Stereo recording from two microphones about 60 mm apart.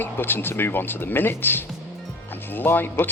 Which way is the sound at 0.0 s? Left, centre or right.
Left.